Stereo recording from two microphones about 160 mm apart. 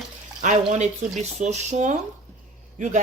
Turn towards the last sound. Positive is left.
turn(degrees=-50)  # may be behind; listen again after turning